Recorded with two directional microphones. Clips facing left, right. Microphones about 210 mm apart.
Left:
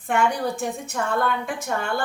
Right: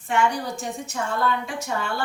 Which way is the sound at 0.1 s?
55° left (ahead or behind).